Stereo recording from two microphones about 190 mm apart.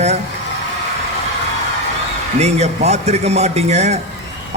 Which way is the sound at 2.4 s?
35° right (ahead or behind).